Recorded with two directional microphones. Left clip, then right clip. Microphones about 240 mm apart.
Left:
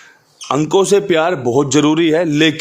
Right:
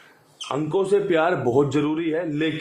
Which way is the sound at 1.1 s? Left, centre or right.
Left.